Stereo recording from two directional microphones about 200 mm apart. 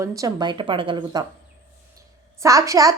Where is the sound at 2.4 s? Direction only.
15° right (ahead or behind).